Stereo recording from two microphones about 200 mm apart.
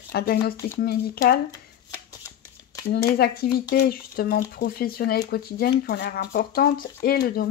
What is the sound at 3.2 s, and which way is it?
Speech, 50° left (ahead or behind).